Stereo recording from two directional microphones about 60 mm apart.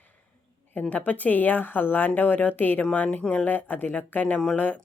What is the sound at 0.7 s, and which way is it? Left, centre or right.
Speech, left.